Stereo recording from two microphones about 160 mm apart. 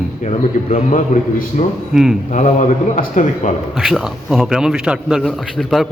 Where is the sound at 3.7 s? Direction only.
Centre (ahead or behind).